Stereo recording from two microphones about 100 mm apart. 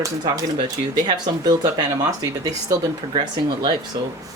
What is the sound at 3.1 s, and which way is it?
Speech, 50° right (ahead or behind).